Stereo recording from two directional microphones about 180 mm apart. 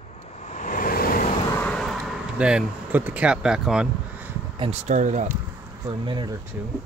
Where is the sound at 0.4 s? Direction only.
40° left (ahead or behind).